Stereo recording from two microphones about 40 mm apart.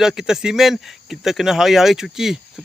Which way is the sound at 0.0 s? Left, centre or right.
Centre.